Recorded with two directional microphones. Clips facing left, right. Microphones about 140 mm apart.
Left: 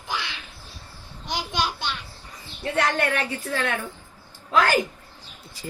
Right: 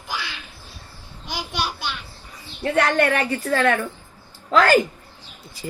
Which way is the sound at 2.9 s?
85° right.